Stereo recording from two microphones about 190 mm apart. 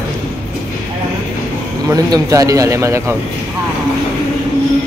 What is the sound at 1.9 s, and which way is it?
Speech, 20° right (ahead or behind).